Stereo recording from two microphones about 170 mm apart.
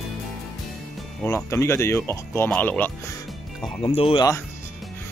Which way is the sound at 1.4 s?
15° left (ahead or behind).